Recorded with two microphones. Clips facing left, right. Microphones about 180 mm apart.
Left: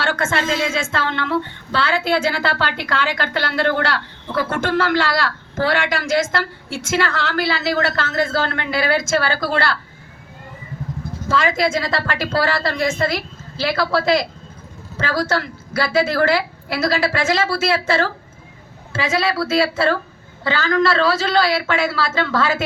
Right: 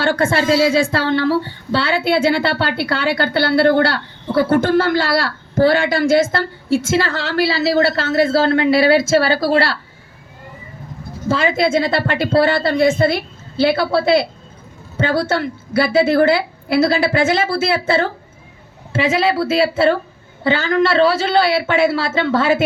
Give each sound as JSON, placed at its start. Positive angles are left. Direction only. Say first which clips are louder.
{"t": 0.0, "sound": "a woman's voice", "louder": "right 5 dB", "side_deg": -35}
{"t": 11.3, "sound": "a woman's voice", "louder": "right 3 dB", "side_deg": -30}
{"t": 19.1, "sound": "a woman's voice", "louder": "right 1 dB", "side_deg": -25}